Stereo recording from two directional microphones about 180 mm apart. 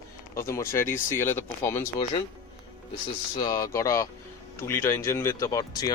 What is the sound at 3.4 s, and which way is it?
Speech, 20° left (ahead or behind).